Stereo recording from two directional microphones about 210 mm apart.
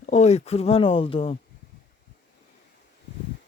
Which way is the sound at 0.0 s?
35° left (ahead or behind).